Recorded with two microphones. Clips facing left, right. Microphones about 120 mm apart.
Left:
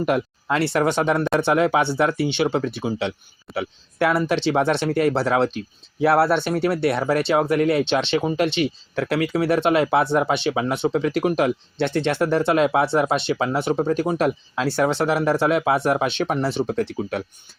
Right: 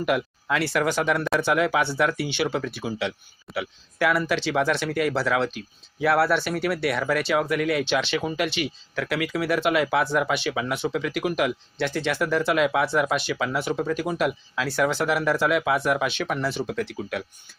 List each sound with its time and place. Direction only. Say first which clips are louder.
0.0 s speech: left 3 dB; 30° left (ahead or behind)